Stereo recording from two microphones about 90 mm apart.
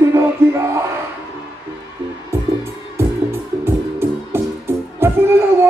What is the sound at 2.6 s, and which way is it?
Music, 30° right (ahead or behind).